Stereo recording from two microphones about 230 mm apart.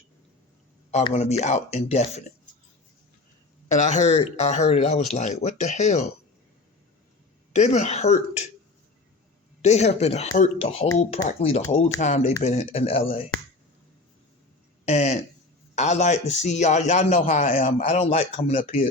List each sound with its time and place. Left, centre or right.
0.9 s a man's voice: left
3.8 s a man's voice: left
7.5 s a man's voice: left
9.6 s a man's voice: left
14.8 s a man's voice: left